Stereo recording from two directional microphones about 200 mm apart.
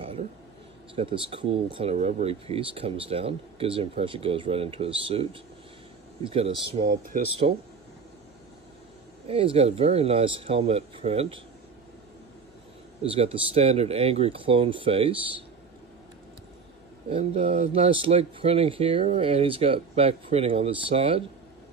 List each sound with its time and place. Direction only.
0.9 s speech: 25° right (ahead or behind)
7.1 s speech: 45° right (ahead or behind)
9.3 s speech: 30° right (ahead or behind)
13.0 s speech: 25° right (ahead or behind)
17.1 s speech: 30° right (ahead or behind)